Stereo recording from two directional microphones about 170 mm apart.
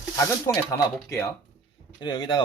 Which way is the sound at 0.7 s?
20° left (ahead or behind).